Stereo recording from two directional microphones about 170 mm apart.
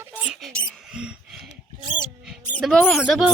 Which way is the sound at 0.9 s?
5° right (ahead or behind).